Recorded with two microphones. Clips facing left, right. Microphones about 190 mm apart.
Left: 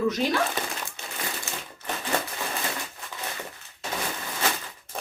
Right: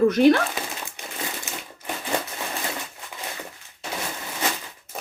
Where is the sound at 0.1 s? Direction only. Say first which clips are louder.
Right 11 dB; 60° right (ahead or behind).